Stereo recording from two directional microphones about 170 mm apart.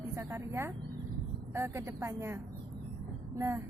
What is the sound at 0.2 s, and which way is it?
Speech, 15° right (ahead or behind).